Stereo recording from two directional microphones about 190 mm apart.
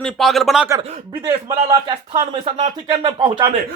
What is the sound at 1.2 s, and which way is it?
Speech, 25° right (ahead or behind).